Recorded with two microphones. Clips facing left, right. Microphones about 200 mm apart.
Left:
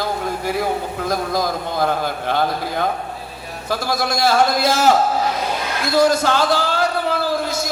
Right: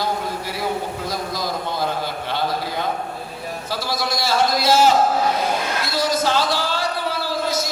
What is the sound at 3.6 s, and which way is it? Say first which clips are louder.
Speech: left 5 dB; 50° left (ahead or behind).